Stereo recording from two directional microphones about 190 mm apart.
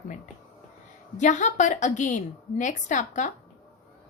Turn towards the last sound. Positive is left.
turn(degrees=40)  # may be behind; listen again after turning